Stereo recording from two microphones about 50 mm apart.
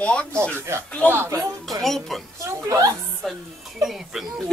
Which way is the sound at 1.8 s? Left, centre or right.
Centre.